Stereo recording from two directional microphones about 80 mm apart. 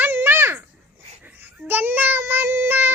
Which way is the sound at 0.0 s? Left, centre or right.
Right.